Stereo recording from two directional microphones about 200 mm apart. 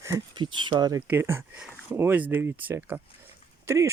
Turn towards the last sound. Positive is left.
turn(degrees=-15)  # may be behind; listen again after turning